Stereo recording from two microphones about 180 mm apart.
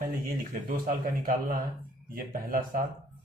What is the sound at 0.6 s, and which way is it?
A man's voice, 50° right (ahead or behind).